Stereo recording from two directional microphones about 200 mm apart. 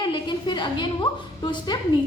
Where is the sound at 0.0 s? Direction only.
25° left (ahead or behind).